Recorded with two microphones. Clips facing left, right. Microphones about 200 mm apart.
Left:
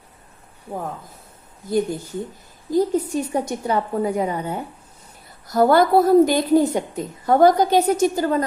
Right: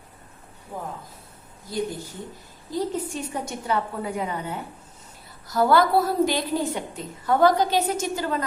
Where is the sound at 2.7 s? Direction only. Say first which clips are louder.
Left 8 dB; 40° left (ahead or behind).